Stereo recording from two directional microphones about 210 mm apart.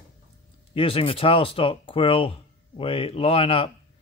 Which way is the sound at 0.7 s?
25° left (ahead or behind).